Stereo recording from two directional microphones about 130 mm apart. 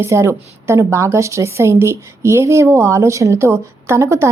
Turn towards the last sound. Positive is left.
turn(degrees=-20)  # may be behind; listen again after turning